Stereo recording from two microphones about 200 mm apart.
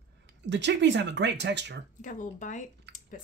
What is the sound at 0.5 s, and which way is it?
Speech, 60° right (ahead or behind).